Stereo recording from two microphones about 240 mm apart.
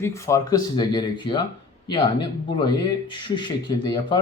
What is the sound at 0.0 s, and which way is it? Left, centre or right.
Speech, centre.